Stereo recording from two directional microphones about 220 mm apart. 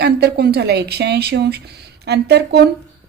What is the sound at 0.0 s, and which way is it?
Speech, 45° right (ahead or behind).